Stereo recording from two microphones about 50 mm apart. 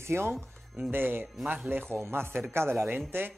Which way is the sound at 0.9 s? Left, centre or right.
Right.